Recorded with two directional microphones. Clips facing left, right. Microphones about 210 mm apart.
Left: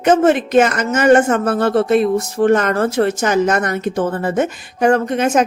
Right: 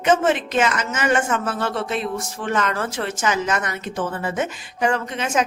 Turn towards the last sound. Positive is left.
turn(degrees=50)  # may be behind; listen again after turning